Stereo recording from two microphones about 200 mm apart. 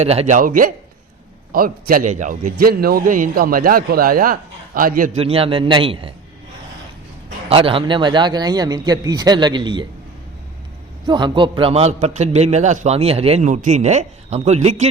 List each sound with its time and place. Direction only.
0.0 s a man's voice: 30° right (ahead or behind)
5.2 s speech: 30° right (ahead or behind)
7.5 s speech: 25° right (ahead or behind)
11.0 s a man's voice: 20° right (ahead or behind)